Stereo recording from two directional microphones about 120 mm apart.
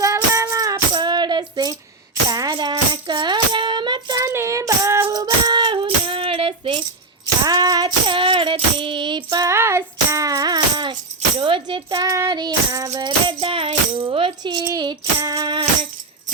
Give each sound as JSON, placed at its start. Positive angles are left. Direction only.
{"t": 0.0, "sound": "music", "side_deg": -25}
{"t": 4.2, "sound": "female singing", "side_deg": -25}
{"t": 5.1, "sound": "music", "side_deg": -35}
{"t": 7.4, "sound": "child singing", "side_deg": -30}
{"t": 9.5, "sound": "music", "side_deg": -25}
{"t": 11.3, "sound": "tambourine", "side_deg": -45}
{"t": 12.0, "sound": "child singing", "side_deg": -25}
{"t": 12.3, "sound": "music", "side_deg": -35}